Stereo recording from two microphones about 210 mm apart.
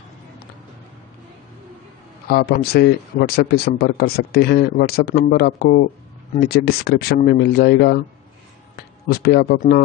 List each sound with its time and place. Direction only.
2.2 s speech: 45° left (ahead or behind)